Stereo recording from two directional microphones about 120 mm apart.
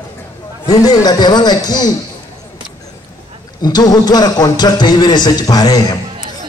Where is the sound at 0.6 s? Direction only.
35° left (ahead or behind).